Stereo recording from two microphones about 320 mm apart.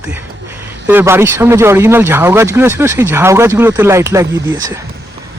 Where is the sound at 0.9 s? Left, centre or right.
Centre.